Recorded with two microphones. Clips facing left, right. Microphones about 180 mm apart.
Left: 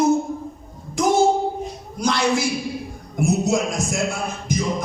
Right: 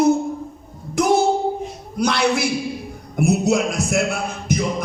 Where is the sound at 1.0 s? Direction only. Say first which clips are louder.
Right 2 dB; 65° right (ahead or behind).